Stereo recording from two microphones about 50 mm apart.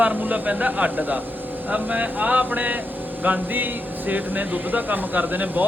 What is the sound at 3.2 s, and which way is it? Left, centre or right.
Speech, right.